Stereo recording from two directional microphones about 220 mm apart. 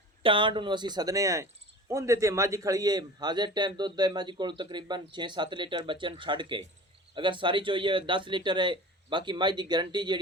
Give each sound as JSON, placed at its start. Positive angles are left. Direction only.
{"t": 0.2, "sound": "a man's voice", "side_deg": -25}